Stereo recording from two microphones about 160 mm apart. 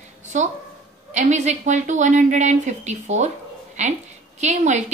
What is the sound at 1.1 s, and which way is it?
A woman's voice, 50° right (ahead or behind).